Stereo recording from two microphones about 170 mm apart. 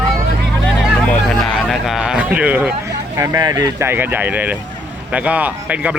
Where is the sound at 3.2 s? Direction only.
20° right (ahead or behind).